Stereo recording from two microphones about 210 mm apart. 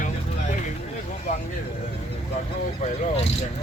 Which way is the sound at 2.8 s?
30° left (ahead or behind).